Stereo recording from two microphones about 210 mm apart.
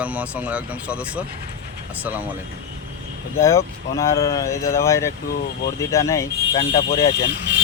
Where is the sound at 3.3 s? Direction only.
15° left (ahead or behind).